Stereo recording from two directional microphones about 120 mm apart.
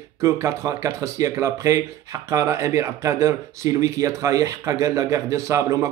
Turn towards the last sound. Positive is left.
turn(degrees=-25)  # may be behind; listen again after turning